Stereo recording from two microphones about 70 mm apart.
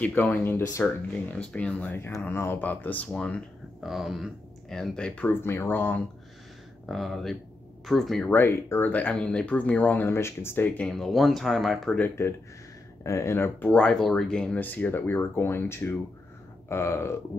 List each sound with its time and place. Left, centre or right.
0.0 s speech: left
1.1 s speech: centre
1.9 s speech: left
2.6 s speech: left
3.8 s speech: centre
4.6 s speech: centre
5.2 s speech: left
6.9 s speech: centre
8.3 s speech: left
8.9 s speech: centre; by 10.7 s left
10.9 s speech: centre
12.0 s speech: left
13.7 s speech: centre
14.6 s speech: left